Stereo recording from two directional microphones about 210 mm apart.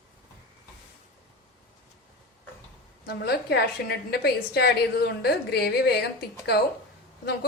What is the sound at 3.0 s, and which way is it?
A woman's voice, 50° left (ahead or behind).